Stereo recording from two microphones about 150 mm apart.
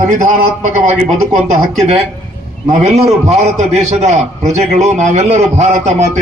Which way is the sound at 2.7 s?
45° right (ahead or behind).